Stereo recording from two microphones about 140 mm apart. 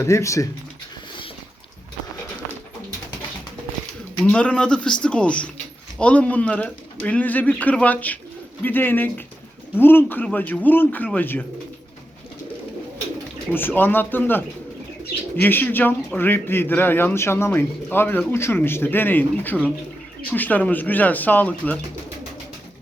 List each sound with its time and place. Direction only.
0.0 s speech: 20° left (ahead or behind)
4.2 s speech: 10° left (ahead or behind)
13.5 s speech: 15° left (ahead or behind)